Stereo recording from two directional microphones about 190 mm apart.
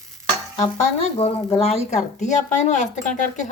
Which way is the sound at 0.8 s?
30° left (ahead or behind).